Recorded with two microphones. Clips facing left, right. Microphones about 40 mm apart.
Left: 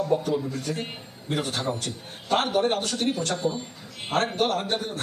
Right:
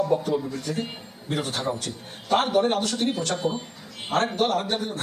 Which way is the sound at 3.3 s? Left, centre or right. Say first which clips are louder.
Right 1 dB; right.